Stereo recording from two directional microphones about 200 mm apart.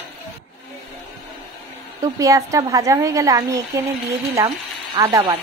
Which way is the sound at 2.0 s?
15° right (ahead or behind).